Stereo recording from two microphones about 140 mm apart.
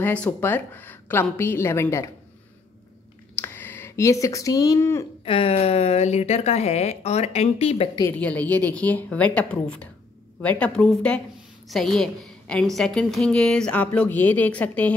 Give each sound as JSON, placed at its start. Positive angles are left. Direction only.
{"t": 0.0, "sound": "a woman's voice", "side_deg": 10}
{"t": 3.3, "sound": "speech", "side_deg": 15}
{"t": 5.2, "sound": "a woman's voice", "side_deg": 45}
{"t": 8.2, "sound": "a woman's voice", "side_deg": 10}